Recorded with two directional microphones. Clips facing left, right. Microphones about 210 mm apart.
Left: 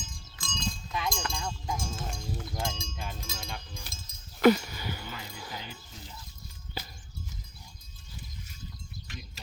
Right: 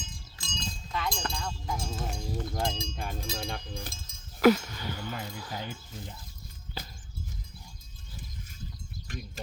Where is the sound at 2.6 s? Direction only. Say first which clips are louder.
Right 4 dB; 35° right (ahead or behind).